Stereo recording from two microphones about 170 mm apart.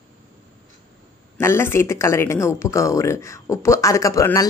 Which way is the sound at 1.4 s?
15° left (ahead or behind).